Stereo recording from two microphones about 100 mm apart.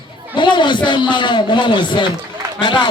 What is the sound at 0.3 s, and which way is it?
A man's voice, 50° left (ahead or behind).